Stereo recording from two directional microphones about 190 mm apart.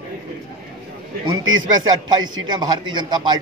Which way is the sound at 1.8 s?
20° right (ahead or behind).